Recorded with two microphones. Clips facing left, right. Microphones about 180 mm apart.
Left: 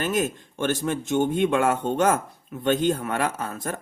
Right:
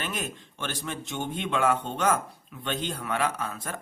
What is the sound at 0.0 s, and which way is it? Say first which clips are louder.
Speech: left 9 dB; 45° left (ahead or behind).